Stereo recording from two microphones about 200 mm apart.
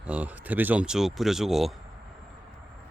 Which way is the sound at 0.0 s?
5° right (ahead or behind).